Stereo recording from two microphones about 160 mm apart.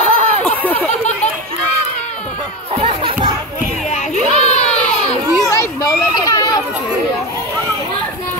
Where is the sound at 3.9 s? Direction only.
45° left (ahead or behind).